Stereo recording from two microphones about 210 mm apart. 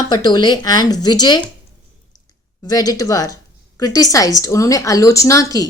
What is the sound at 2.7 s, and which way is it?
A woman's voice, 15° left (ahead or behind).